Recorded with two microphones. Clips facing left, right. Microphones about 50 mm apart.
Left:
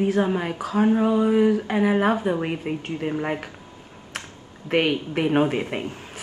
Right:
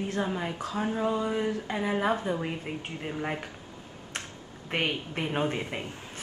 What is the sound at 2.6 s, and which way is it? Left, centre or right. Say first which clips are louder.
Speech: left 8 dB; centre.